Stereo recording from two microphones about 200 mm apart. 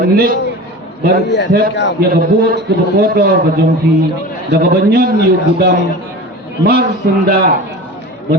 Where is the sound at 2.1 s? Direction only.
50° right (ahead or behind).